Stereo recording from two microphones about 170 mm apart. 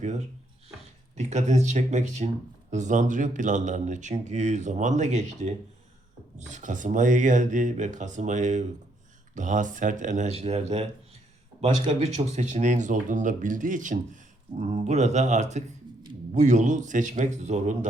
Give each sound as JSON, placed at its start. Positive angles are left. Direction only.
{"t": 1.1, "sound": "speech", "side_deg": -45}
{"t": 11.9, "sound": "speech", "side_deg": -40}